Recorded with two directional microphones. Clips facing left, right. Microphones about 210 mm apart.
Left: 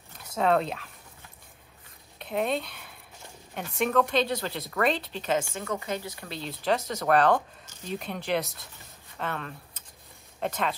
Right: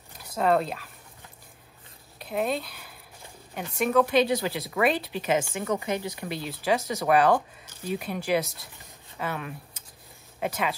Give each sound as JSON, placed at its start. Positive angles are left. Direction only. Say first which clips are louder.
{"t": 0.4, "sound": "speech", "louder": "right 1 dB", "side_deg": 0}
{"t": 2.1, "sound": "speech", "louder": "even", "side_deg": 0}